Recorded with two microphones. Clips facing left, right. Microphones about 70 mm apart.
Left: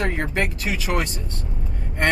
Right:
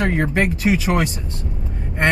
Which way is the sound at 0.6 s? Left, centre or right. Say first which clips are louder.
Right 6 dB; right.